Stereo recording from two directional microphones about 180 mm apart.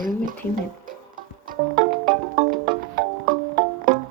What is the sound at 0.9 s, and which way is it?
Music, 50° right (ahead or behind).